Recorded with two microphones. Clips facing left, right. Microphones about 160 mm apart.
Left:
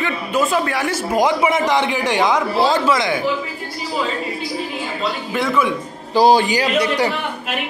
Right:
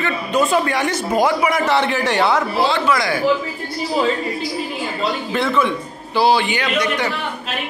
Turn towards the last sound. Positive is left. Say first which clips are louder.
# left 3 dB
turn(degrees=35)  # may be behind; listen again after turning